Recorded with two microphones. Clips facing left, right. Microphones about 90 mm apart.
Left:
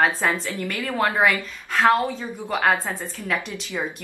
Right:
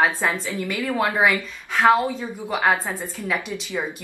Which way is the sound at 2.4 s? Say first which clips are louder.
Even; 5° right (ahead or behind).